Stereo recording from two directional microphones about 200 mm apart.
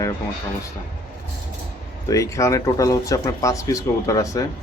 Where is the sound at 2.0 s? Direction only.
15° left (ahead or behind).